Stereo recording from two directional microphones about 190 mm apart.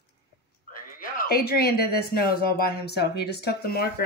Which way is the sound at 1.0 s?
45° left (ahead or behind).